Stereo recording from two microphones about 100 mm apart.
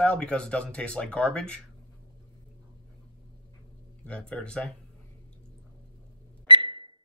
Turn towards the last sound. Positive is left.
turn(degrees=-55)  # may be behind; listen again after turning